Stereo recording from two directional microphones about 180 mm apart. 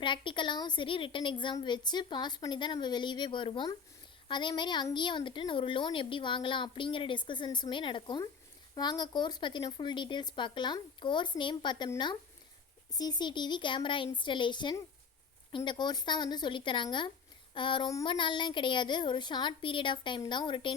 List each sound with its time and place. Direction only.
0.0 s a woman's voice: 25° left (ahead or behind)